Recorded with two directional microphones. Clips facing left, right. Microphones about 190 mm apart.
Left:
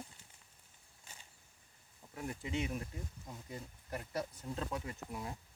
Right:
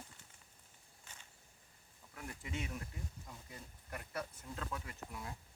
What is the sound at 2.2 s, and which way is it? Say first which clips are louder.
Speech: left 6 dB; 25° left (ahead or behind).